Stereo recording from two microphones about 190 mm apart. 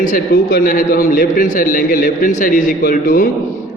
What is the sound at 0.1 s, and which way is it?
A man's voice, 50° left (ahead or behind).